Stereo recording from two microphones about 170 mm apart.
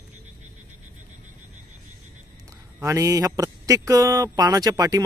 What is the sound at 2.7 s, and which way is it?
Speech, 10° right (ahead or behind).